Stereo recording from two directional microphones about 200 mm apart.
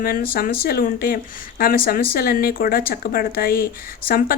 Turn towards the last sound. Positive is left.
turn(degrees=45)  # may be behind; listen again after turning